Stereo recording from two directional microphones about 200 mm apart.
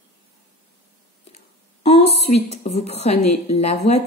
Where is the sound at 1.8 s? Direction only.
30° left (ahead or behind).